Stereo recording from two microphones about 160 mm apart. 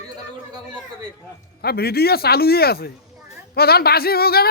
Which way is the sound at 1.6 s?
75° left (ahead or behind).